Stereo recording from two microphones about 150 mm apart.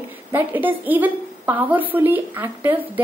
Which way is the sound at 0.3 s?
10° right (ahead or behind).